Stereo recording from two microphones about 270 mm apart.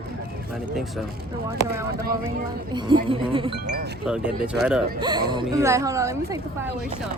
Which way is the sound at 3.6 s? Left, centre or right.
Right.